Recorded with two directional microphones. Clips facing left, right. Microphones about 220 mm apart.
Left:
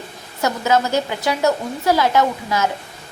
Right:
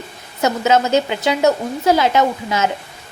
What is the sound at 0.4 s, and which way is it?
A woman's voice, 20° right (ahead or behind).